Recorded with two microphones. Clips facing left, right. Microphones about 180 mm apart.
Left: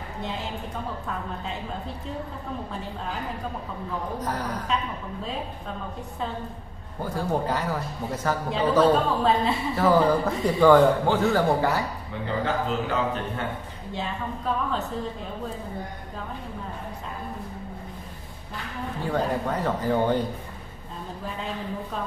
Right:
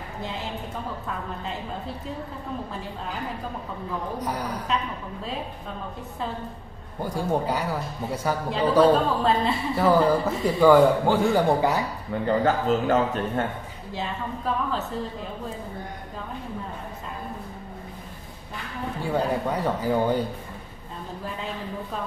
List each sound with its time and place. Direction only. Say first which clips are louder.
1.0 s speech: even; centre (ahead or behind)
4.2 s speech: even; 10° right (ahead or behind)
7.0 s speech: right 1 dB; 10° right (ahead or behind)
8.7 s speech: right 2 dB; centre (ahead or behind); by 11.8 s 15° right (ahead or behind)
12.3 s speech: right 5 dB; 45° right (ahead or behind)
13.9 s speech: even; centre (ahead or behind)
19.0 s speech: right 1 dB; 10° right (ahead or behind)